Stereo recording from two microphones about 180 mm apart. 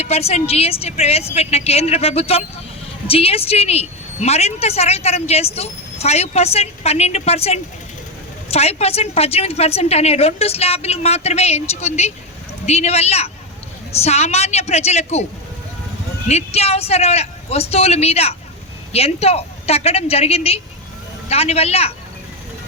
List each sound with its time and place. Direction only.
0.0 s a woman's voice: 35° left (ahead or behind)
16.3 s a woman's voice: 35° left (ahead or behind)